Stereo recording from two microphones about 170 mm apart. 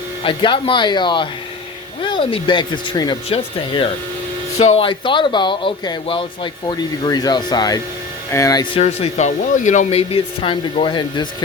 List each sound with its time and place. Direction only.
0.3 s speech: 30° left (ahead or behind)
8.7 s speech: 35° left (ahead or behind)